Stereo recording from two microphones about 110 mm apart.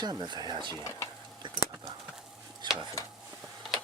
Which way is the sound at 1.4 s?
45° right (ahead or behind).